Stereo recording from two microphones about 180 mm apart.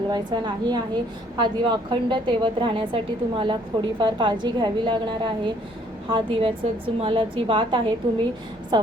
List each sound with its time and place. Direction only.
0.1 s a woman's voice: 25° right (ahead or behind)